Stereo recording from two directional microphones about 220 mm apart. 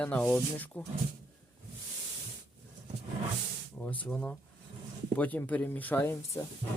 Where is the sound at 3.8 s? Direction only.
5° left (ahead or behind).